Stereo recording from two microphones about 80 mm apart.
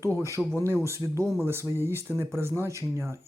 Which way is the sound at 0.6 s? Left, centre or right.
Right.